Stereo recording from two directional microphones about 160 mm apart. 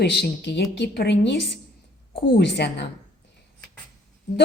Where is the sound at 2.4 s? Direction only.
90° left.